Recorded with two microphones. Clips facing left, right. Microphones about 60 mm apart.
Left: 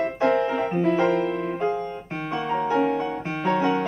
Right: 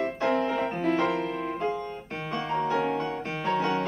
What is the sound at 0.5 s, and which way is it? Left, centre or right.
Music, centre.